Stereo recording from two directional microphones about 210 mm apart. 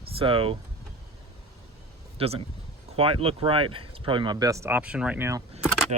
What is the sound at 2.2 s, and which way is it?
Speech, 25° right (ahead or behind).